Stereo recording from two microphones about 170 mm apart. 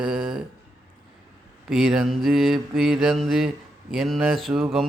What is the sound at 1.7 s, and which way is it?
Mantra, 5° right (ahead or behind).